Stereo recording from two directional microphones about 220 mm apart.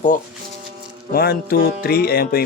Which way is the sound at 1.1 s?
45° left (ahead or behind).